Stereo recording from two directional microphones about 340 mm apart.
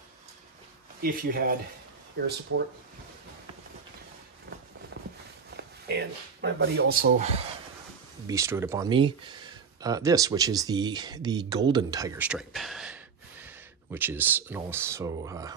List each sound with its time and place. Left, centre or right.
1.0 s speech: right
5.6 s speech: right
8.3 s speech: centre